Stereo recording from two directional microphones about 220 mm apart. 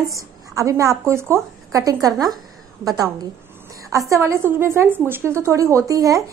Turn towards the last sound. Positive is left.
turn(degrees=-15)  # may be behind; listen again after turning